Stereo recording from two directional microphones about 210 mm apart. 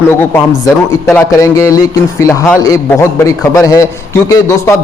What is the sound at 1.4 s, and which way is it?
A man's voice, 15° left (ahead or behind).